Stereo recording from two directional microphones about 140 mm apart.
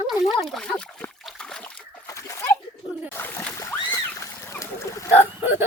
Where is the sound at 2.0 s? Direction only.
20° left (ahead or behind).